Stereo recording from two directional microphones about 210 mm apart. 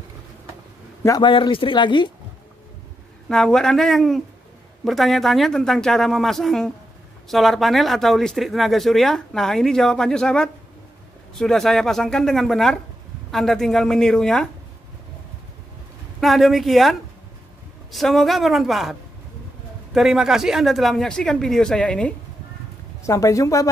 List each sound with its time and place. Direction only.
1.0 s speech: 20° left (ahead or behind)
3.3 s speech: 5° left (ahead or behind)
16.2 s speech: centre (ahead or behind)
17.9 s speech: centre (ahead or behind)